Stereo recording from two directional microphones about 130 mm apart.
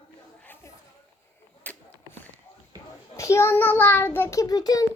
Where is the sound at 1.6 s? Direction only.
15° left (ahead or behind).